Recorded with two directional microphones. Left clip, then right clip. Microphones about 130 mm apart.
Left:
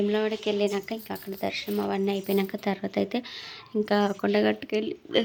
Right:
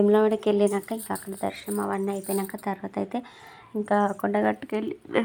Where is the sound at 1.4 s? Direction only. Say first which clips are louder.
Left 2 dB; 15° left (ahead or behind).